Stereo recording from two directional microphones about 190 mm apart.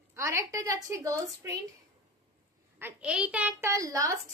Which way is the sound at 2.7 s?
10° right (ahead or behind).